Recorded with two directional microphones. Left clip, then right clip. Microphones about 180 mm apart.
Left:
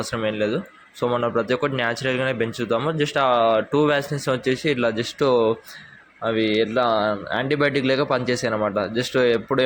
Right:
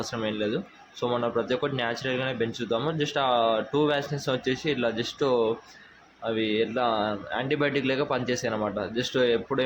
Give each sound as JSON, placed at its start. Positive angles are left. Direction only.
{"t": 0.0, "sound": "speech", "side_deg": 15}